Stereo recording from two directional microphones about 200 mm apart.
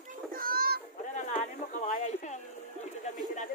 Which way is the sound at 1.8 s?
35° left (ahead or behind).